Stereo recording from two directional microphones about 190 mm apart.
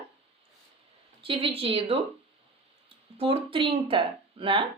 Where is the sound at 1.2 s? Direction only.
30° right (ahead or behind).